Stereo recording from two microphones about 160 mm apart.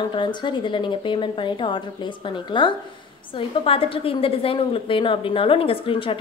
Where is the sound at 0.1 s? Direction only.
30° left (ahead or behind).